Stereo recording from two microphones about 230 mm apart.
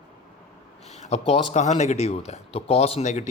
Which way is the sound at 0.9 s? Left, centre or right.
Left.